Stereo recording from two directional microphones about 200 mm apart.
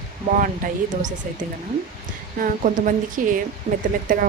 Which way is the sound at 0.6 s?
40° right (ahead or behind).